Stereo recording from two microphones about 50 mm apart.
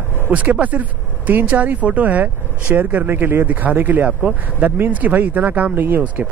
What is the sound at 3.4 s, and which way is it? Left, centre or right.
Speech, right.